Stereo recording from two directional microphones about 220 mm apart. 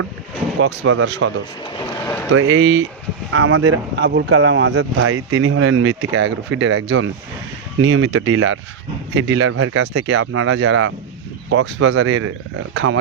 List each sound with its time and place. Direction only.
0.9 s speech: 60° right (ahead or behind)
2.3 s speech: 55° right (ahead or behind)
3.3 s speech: 75° right (ahead or behind)
9.8 s speech: 55° right (ahead or behind)